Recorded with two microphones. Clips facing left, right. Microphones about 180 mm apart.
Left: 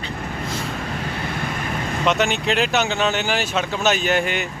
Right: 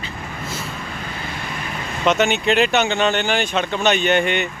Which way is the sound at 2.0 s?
Centre (ahead or behind).